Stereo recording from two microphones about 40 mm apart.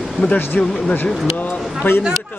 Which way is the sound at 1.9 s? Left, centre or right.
Left.